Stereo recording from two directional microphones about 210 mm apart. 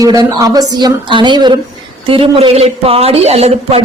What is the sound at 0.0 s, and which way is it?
Speech, 15° right (ahead or behind).